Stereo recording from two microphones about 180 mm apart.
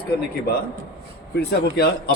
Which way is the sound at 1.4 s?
60° left (ahead or behind).